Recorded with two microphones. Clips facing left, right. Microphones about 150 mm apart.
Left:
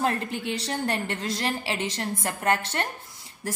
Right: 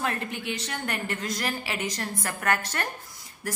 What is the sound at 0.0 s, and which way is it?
A woman's voice, 30° left (ahead or behind).